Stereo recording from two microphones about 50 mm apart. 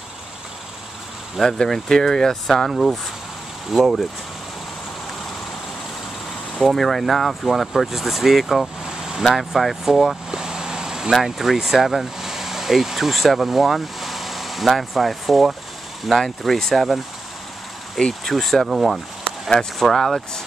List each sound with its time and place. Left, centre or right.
1.3 s speech: centre
6.5 s speech: centre
8.8 s vehicle: centre
9.2 s speech: centre
17.9 s speech: centre